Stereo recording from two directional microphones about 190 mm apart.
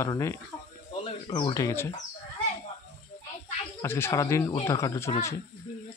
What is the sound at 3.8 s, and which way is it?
Speech, 15° left (ahead or behind).